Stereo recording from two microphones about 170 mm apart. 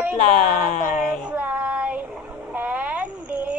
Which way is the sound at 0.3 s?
50° left (ahead or behind).